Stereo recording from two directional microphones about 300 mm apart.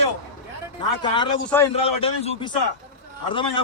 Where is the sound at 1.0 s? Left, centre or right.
Centre.